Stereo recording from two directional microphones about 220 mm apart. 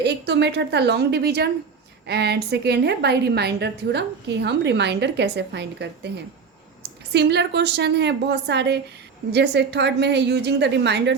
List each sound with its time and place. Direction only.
0.0 s a woman's voice: 50° right (ahead or behind)
7.1 s a woman's voice: 50° right (ahead or behind)